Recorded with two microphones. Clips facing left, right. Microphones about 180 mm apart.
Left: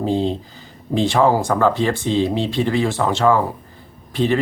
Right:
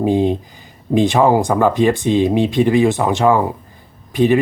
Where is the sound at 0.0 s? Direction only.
15° right (ahead or behind).